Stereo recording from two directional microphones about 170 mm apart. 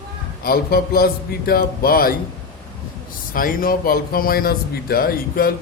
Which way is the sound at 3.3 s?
55° left (ahead or behind).